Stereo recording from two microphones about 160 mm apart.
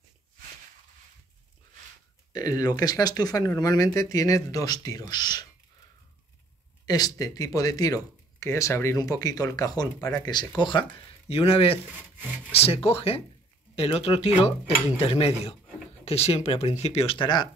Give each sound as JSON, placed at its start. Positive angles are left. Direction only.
{"t": 2.3, "sound": "speech", "side_deg": 25}
{"t": 6.9, "sound": "speech", "side_deg": 25}